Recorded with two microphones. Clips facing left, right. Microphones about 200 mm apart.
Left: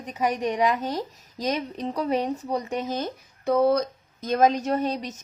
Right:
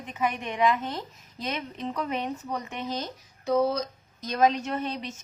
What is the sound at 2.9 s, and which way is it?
Speech, 55° left (ahead or behind).